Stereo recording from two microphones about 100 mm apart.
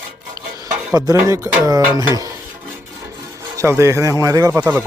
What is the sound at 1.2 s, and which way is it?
A man's voice, 35° right (ahead or behind).